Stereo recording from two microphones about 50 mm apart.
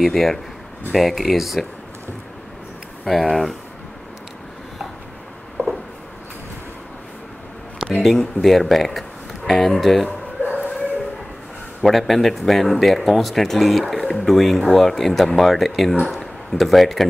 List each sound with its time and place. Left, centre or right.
0.0 s speech: centre
3.1 s speech: centre
5.6 s a sound: right
8.0 s speech: centre
10.4 s bow-wow: left
11.8 s speech: centre